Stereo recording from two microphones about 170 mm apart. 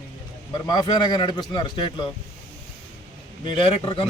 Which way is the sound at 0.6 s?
25° left (ahead or behind).